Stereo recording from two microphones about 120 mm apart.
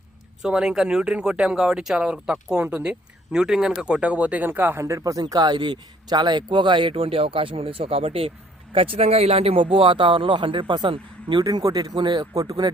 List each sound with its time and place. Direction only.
0.4 s speech: 5° right (ahead or behind); by 12.7 s 35° right (ahead or behind)